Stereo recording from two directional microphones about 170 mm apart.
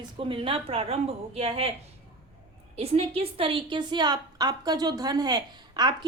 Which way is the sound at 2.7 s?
35° right (ahead or behind).